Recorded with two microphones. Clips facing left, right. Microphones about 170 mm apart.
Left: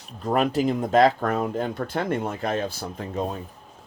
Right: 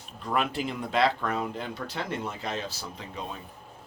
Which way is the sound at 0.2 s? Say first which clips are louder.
Left 7 dB; 40° left (ahead or behind).